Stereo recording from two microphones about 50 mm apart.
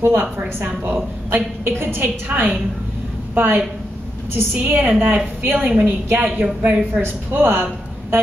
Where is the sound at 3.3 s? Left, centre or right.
Right.